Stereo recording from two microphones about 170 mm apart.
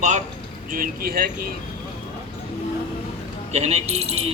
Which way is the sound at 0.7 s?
60° right (ahead or behind).